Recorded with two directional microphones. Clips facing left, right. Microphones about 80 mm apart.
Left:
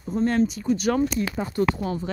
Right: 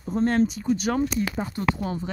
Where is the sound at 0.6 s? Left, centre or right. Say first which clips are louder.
Left 2 dB; right.